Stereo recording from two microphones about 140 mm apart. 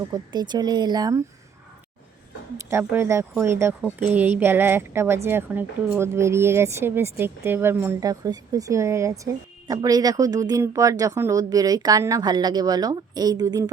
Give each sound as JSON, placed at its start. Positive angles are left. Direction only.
{"t": 0.1, "sound": "speech", "side_deg": -30}
{"t": 2.6, "sound": "speech", "side_deg": -15}